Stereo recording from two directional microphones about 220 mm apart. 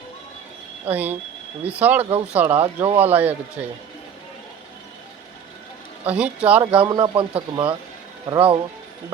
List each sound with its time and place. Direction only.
0.9 s a man's voice: 10° right (ahead or behind)
2.7 s speech: 25° right (ahead or behind)
3.0 s a man's voice: 10° right (ahead or behind)
6.1 s a man's voice: 5° right (ahead or behind)
6.7 s speech: 20° right (ahead or behind)